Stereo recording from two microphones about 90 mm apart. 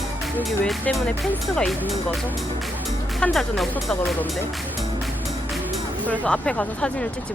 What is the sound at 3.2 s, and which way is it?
Speech, centre (ahead or behind).